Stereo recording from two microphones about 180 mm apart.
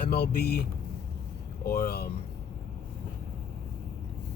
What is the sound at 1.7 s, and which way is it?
Speech, 60° left (ahead or behind).